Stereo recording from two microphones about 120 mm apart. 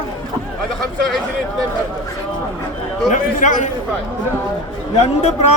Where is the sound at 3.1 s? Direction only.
90° left.